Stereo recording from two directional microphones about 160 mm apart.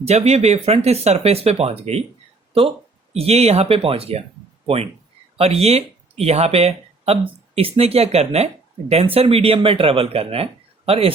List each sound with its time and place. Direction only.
0.0 s speech: 40° right (ahead or behind)